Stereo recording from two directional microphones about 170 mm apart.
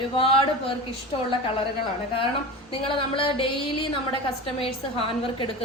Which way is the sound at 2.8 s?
30° left (ahead or behind).